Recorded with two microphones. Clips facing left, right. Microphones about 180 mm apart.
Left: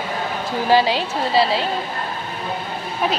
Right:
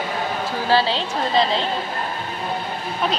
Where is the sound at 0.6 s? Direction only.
15° left (ahead or behind).